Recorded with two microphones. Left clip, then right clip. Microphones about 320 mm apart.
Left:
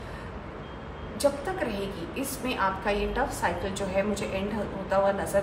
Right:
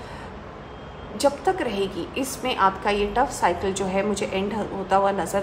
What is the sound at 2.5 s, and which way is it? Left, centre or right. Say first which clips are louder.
A woman's voice: right 6 dB; right.